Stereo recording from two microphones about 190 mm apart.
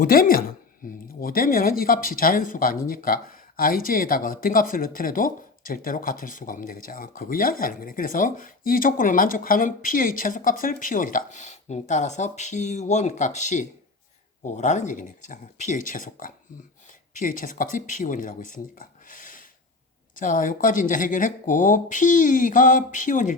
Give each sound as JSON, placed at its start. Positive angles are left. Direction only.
{"t": 0.0, "sound": "speech", "side_deg": 50}